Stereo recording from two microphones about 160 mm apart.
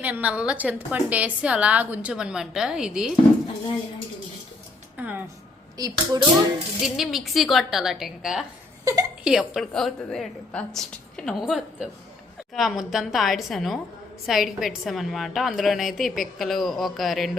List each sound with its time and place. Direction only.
0.0 s a woman's voice: 10° right (ahead or behind)
4.9 s music: 10° right (ahead or behind)
5.7 s speech: 25° right (ahead or behind)
6.8 s a woman's voice: centre (ahead or behind)
8.8 s a woman's voice: 20° right (ahead or behind)
9.2 s a woman's voice: 5° right (ahead or behind)